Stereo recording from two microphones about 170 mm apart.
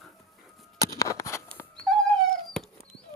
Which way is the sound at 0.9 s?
20° left (ahead or behind).